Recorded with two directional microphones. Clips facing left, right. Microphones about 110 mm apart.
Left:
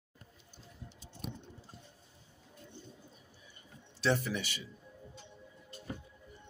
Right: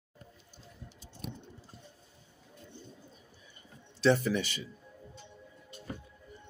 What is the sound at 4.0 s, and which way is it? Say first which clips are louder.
Speech: right 6 dB; 5° left (ahead or behind).